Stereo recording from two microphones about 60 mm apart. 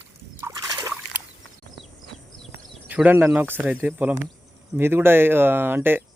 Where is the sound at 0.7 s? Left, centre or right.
Right.